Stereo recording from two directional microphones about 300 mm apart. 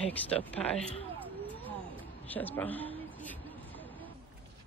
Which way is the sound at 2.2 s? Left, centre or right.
Centre.